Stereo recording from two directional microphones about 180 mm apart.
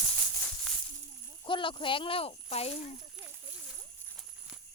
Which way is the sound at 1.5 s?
30° left (ahead or behind).